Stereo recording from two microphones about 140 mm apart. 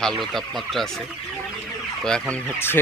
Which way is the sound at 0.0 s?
5° left (ahead or behind).